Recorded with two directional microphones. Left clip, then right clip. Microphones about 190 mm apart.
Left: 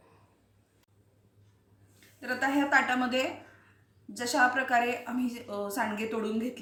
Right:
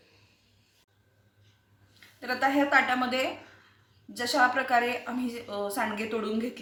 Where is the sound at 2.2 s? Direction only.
10° right (ahead or behind).